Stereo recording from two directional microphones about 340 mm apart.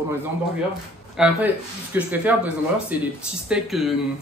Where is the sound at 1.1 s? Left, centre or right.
Centre.